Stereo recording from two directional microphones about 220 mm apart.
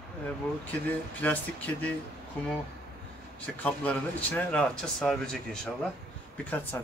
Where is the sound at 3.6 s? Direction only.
5° left (ahead or behind).